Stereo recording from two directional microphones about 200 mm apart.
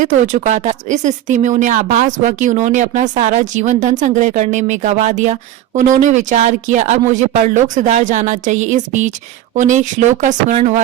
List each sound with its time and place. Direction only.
0.0 s a woman's voice: 40° right (ahead or behind)